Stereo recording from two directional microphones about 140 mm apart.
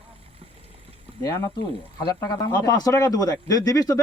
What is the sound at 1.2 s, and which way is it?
Speech, 25° left (ahead or behind).